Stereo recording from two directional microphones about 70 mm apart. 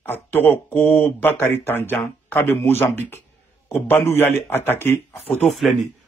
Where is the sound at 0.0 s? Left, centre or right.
Left.